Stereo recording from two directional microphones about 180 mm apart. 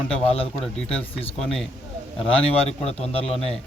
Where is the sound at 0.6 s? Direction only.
5° left (ahead or behind).